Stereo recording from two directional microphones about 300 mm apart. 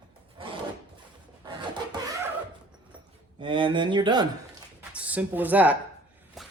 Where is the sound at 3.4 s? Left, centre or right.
Centre.